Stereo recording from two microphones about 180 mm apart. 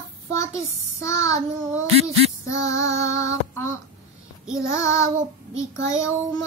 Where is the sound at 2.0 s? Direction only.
15° left (ahead or behind).